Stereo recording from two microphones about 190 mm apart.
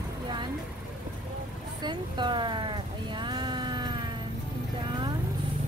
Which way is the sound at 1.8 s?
25° right (ahead or behind).